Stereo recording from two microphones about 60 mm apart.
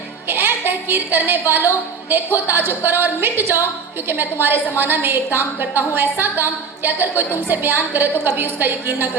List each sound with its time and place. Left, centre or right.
0.3 s a woman's voice: right